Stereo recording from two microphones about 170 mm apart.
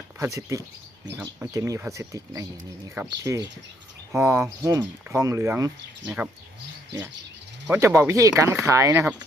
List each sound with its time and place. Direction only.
0.2 s speech: 15° right (ahead or behind)
7.7 s speech: 15° right (ahead or behind)